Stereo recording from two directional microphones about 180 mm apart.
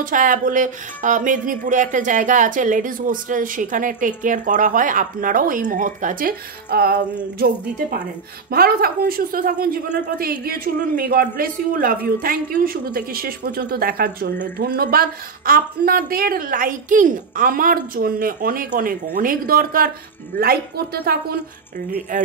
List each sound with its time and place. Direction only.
0.0 s speech: 45° right (ahead or behind)
8.5 s speech: 55° right (ahead or behind)
22.1 s speech: 45° right (ahead or behind)